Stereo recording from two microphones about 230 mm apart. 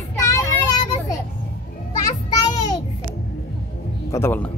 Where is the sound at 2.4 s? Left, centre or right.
Centre.